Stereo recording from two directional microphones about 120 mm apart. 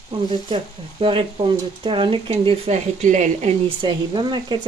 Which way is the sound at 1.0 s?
45° right (ahead or behind).